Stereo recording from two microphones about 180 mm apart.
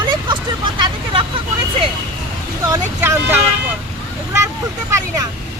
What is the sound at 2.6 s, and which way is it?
Speech, 15° right (ahead or behind).